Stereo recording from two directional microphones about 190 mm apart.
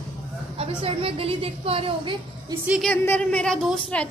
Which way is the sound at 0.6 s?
30° right (ahead or behind).